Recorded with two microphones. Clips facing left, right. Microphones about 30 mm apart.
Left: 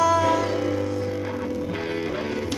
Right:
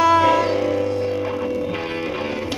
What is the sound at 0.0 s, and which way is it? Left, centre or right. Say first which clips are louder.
Music: right 5 dB; right.